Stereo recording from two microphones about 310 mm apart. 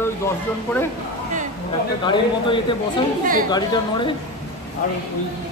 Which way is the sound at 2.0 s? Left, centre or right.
Centre.